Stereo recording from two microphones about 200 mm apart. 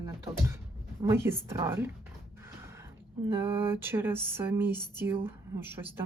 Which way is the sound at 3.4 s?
10° right (ahead or behind).